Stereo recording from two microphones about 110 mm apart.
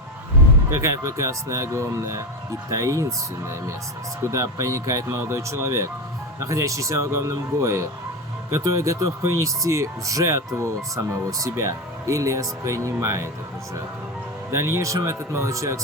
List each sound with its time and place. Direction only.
0.7 s speech: 30° right (ahead or behind)
14.5 s speech: 25° right (ahead or behind)